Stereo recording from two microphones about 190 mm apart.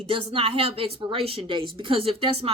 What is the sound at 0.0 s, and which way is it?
Speech, 30° right (ahead or behind).